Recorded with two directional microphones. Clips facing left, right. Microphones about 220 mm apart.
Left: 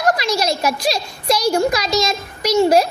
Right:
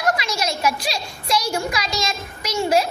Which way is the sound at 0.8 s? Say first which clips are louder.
Left 7 dB; 40° left (ahead or behind).